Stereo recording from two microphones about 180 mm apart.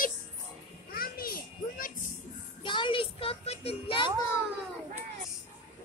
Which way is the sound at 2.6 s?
25° left (ahead or behind).